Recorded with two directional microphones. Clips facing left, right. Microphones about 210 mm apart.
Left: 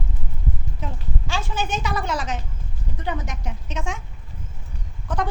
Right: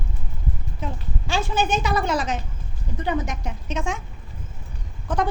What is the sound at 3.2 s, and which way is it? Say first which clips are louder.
Speech: right 3 dB; 60° right (ahead or behind).